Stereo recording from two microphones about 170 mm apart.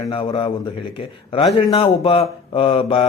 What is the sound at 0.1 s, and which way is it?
A man's voice, 30° left (ahead or behind).